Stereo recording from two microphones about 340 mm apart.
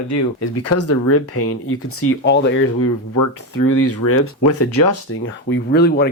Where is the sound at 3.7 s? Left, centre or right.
Left.